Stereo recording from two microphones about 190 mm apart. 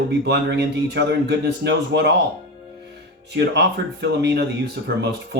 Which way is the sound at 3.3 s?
65° right (ahead or behind).